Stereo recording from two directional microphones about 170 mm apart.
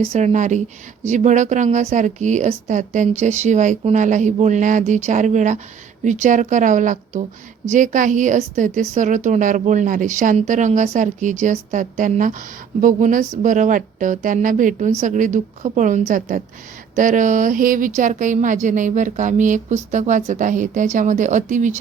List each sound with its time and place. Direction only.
0.0 s speech: 40° right (ahead or behind)